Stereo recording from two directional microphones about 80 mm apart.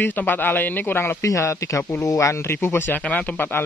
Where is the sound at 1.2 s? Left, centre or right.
Left.